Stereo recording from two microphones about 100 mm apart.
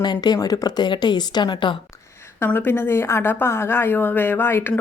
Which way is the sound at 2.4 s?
20° left (ahead or behind).